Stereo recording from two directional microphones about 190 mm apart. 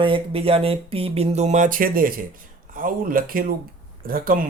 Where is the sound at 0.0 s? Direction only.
30° right (ahead or behind).